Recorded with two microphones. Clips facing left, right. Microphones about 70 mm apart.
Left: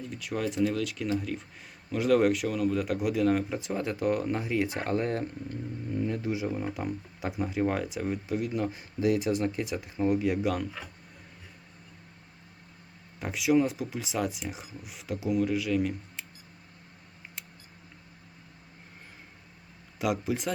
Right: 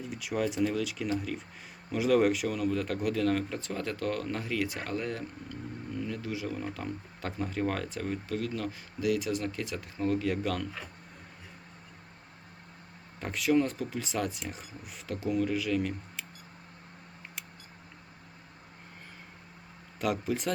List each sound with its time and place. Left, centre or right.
0.0 s a man's voice: centre
13.1 s speech: centre
20.0 s speech: centre